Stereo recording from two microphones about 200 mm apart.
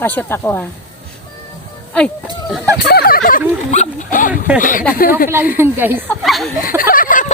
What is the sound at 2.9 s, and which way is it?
Speech, 50° left (ahead or behind).